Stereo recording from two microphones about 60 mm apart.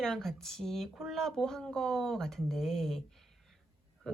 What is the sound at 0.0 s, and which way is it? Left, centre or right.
Speech, centre.